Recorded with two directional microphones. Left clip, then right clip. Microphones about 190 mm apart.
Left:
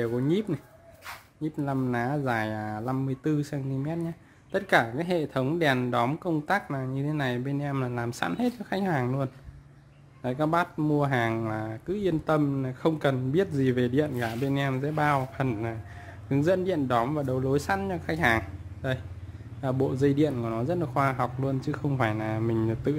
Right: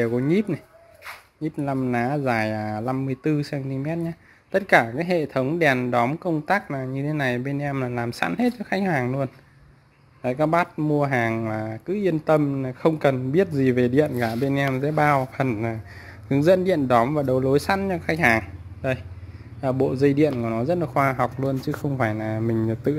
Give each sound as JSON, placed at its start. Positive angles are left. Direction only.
{"t": 0.0, "sound": "speech", "side_deg": -20}
{"t": 6.4, "sound": "speech", "side_deg": -10}
{"t": 10.8, "sound": "speech", "side_deg": 0}
{"t": 12.4, "sound": "speech", "side_deg": 0}
{"t": 12.6, "sound": "speech", "side_deg": -15}
{"t": 22.1, "sound": "speech", "side_deg": 0}